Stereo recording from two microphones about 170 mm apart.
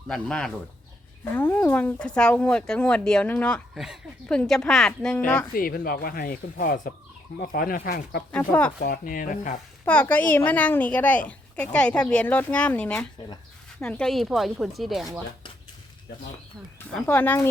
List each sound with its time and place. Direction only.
0.1 s speech: 5° left (ahead or behind)
5.5 s speech: 60° left (ahead or behind)
8.3 s a woman's voice: 10° left (ahead or behind)
8.8 s speech: 55° left (ahead or behind)
9.8 s a woman's voice: 10° left (ahead or behind)
16.9 s a woman's voice: 10° left (ahead or behind)